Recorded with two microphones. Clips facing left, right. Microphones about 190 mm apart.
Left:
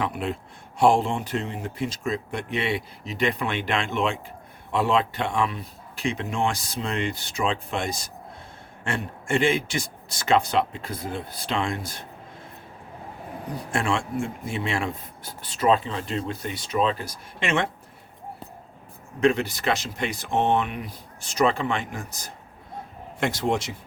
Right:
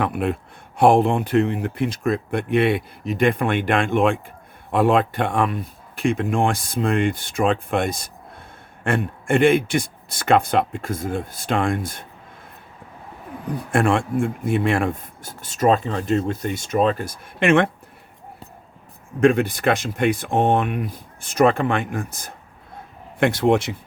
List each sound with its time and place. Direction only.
0.0 s speech: 55° right (ahead or behind)
13.7 s speech: 55° right (ahead or behind)
19.2 s speech: 50° right (ahead or behind)